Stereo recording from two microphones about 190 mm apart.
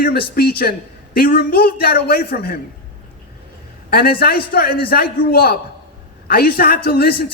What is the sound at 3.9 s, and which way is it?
A man's voice, 55° left (ahead or behind).